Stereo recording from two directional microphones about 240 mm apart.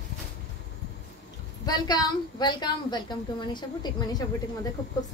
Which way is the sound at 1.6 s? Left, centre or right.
Centre.